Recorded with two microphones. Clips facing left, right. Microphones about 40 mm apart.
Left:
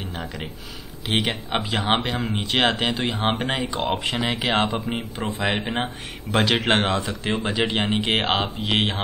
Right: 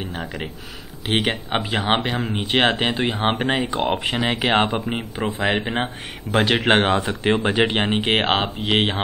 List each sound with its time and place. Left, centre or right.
1.0 s speech: centre
2.4 s speech: centre
4.9 s speech: centre
7.0 s speech: right
8.6 s speech: centre